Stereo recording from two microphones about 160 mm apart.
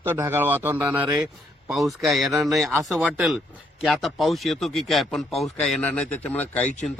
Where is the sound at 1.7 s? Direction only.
Centre (ahead or behind).